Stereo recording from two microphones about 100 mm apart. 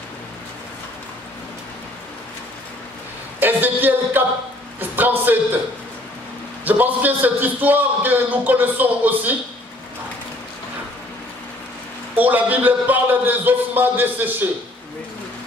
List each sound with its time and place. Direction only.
3.3 s speech: 20° right (ahead or behind)
6.6 s a man's voice: 15° right (ahead or behind)
12.2 s speech: 15° right (ahead or behind)